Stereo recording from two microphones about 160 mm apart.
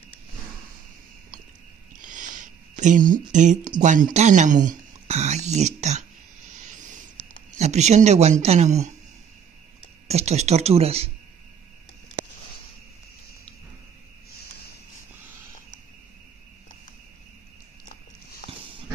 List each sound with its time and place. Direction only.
2.0 s speech: 55° right (ahead or behind)
7.5 s speech: 45° right (ahead or behind)
10.0 s speech: 40° right (ahead or behind)